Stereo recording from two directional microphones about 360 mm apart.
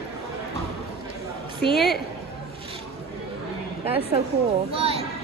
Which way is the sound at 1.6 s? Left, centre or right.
Centre.